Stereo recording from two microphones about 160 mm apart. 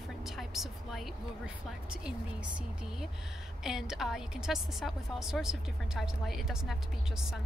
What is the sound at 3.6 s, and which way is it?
A woman's voice, 5° right (ahead or behind).